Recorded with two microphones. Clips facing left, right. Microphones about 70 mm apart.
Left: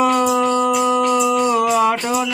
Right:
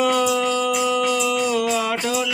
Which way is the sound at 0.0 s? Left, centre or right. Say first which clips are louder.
Left 3 dB; left.